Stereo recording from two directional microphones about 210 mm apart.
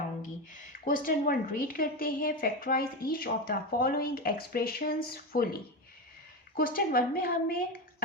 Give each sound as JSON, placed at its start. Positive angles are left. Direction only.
{"t": 0.9, "sound": "a woman's voice", "side_deg": 40}